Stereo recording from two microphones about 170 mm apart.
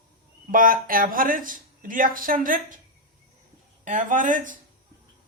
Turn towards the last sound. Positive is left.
turn(degrees=-50)  # may be behind; listen again after turning